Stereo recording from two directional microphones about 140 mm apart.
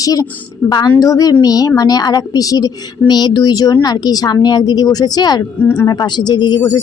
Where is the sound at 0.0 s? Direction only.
25° left (ahead or behind).